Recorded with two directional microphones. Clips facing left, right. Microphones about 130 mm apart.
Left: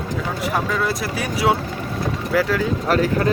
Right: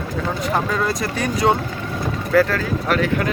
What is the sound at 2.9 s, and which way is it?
Speech, 35° left (ahead or behind).